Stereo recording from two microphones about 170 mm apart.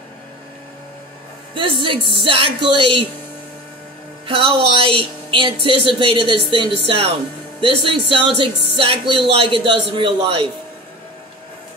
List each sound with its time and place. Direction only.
1.5 s speech: 30° right (ahead or behind)
4.3 s speech: 30° right (ahead or behind)